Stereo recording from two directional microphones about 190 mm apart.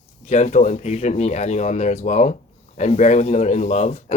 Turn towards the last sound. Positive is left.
turn(degrees=35)  # may be behind; listen again after turning